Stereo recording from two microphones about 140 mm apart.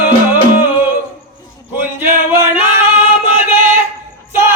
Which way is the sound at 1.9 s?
15° right (ahead or behind).